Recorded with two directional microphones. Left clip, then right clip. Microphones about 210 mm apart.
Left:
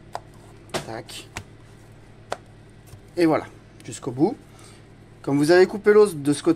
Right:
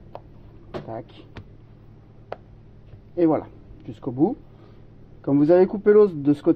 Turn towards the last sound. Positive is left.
turn(degrees=-20)  # may be behind; listen again after turning